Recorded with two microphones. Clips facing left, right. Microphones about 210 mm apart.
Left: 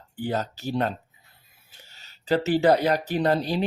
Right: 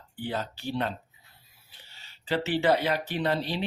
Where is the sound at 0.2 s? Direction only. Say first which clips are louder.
Left 5 dB; 40° left (ahead or behind).